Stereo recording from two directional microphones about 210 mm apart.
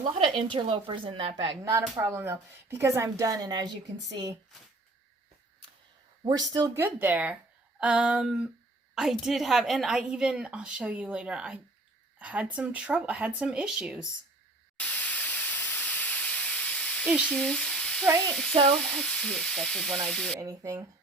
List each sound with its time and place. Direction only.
0.3 s a woman's voice: 25° right (ahead or behind)
1.7 s speech: 10° right (ahead or behind)
6.2 s a woman's voice: 20° right (ahead or behind)
14.8 s a sound: 5° left (ahead or behind)
17.1 s a woman's voice: centre (ahead or behind)
20.4 s speech: 15° right (ahead or behind)